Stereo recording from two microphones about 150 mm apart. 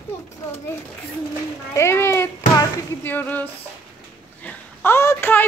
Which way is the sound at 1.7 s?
15° left (ahead or behind).